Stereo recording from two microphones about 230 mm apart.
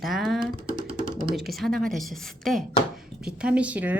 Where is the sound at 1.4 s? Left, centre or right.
Centre.